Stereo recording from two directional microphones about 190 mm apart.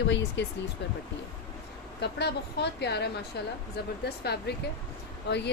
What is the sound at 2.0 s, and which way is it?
Speech, 60° left (ahead or behind).